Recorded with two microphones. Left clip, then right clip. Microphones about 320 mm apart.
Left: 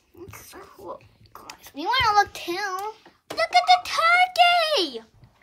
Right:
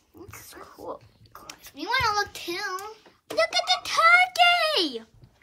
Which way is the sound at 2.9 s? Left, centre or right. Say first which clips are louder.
Right 4 dB; centre.